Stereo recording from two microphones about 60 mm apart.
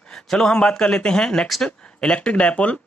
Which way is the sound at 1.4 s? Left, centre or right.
Centre.